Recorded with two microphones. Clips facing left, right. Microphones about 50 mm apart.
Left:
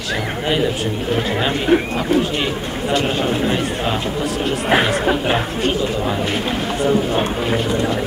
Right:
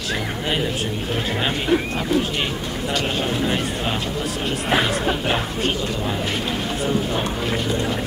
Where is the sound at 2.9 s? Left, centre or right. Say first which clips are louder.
Left 5 dB; left.